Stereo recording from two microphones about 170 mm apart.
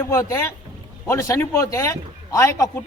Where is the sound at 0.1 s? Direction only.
15° left (ahead or behind).